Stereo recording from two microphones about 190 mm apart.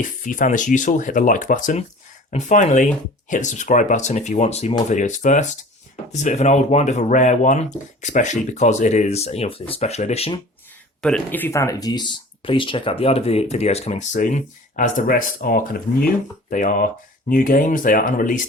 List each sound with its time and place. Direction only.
0.3 s speech: 45° left (ahead or behind)
11.0 s speech: 5° left (ahead or behind); by 18.4 s 45° left (ahead or behind)